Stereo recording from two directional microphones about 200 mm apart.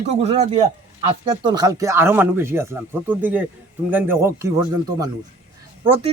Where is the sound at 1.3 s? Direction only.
20° right (ahead or behind).